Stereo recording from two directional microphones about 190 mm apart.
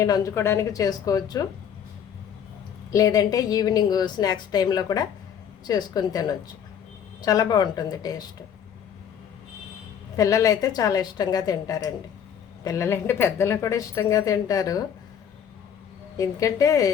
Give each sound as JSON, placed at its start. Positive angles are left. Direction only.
{"t": 0.0, "sound": "a woman's voice", "side_deg": 15}
{"t": 2.9, "sound": "a woman's voice", "side_deg": 20}
{"t": 10.2, "sound": "a woman's voice", "side_deg": 15}
{"t": 16.1, "sound": "a woman's voice", "side_deg": 15}